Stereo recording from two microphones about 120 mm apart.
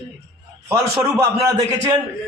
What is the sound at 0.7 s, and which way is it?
Speech, 20° right (ahead or behind).